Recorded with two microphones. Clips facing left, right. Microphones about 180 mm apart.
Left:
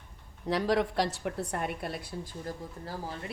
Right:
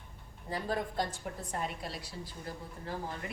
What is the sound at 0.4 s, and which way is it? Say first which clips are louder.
A woman's voice: left 8 dB; 85° left.